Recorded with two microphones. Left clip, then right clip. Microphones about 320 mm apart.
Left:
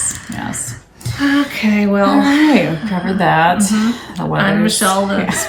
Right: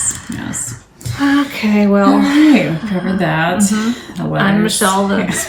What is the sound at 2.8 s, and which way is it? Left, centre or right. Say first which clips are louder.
Speech: left 3 dB; centre.